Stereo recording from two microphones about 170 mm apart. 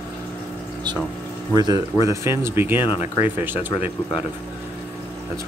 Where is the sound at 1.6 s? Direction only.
20° right (ahead or behind).